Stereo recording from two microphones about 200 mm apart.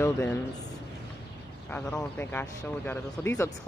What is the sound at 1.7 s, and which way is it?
Speech, 10° left (ahead or behind).